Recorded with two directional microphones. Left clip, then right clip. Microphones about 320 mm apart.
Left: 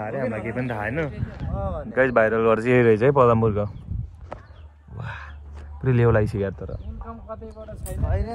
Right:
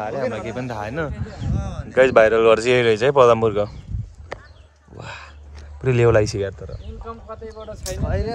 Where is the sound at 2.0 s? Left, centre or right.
Centre.